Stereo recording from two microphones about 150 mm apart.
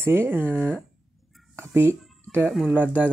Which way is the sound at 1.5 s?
15° right (ahead or behind).